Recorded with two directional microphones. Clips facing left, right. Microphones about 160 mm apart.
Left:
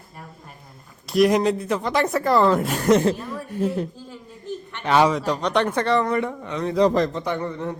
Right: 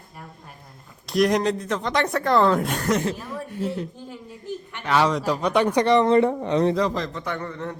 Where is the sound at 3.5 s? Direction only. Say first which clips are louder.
Left 5 dB; 45° left (ahead or behind).